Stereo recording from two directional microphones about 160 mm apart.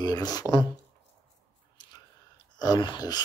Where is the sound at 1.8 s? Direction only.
25° left (ahead or behind).